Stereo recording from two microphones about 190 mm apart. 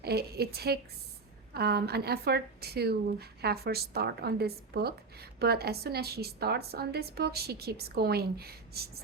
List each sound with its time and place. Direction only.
0.0 s a woman's voice: 55° right (ahead or behind)